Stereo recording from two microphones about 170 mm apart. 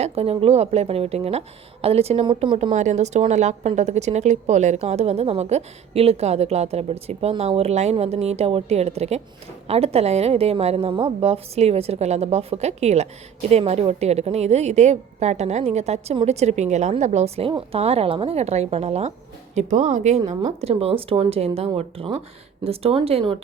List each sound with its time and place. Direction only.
0.0 s speech: 35° right (ahead or behind)
2.7 s speech: 45° right (ahead or behind)